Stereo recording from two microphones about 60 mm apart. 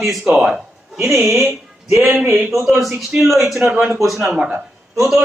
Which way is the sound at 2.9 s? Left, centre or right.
Centre.